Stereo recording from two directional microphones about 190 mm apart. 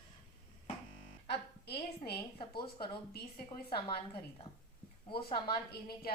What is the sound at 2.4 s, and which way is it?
Speech, 25° left (ahead or behind).